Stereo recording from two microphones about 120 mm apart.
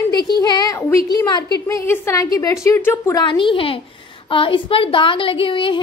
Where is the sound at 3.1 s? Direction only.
40° left (ahead or behind).